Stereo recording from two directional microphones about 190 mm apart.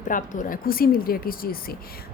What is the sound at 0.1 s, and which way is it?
A woman's voice, 45° left (ahead or behind).